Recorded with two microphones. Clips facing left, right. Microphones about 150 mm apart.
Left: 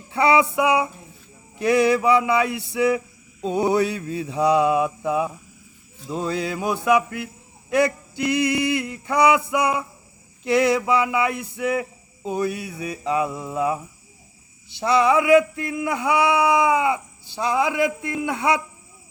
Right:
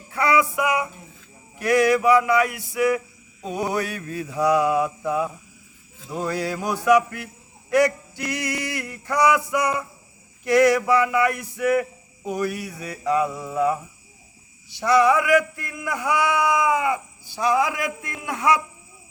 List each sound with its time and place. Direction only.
0.1 s music: 25° left (ahead or behind)
0.5 s speech: 30° left (ahead or behind)
14.9 s speech: 25° left (ahead or behind)